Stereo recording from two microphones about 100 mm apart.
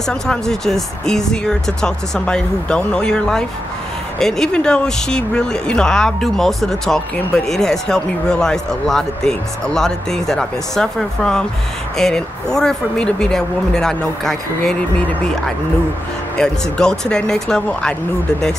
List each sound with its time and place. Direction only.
0.0 s speech: 5° left (ahead or behind)
16.3 s speech: 5° left (ahead or behind)